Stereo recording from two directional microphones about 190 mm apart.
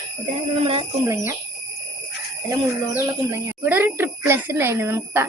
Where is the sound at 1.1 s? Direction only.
15° right (ahead or behind).